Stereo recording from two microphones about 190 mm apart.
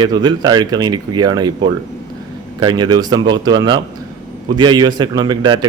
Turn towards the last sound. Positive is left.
turn(degrees=-25)  # may be behind; listen again after turning